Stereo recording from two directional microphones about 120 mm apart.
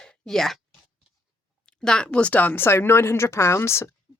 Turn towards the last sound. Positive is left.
turn(degrees=20)  # may be behind; listen again after turning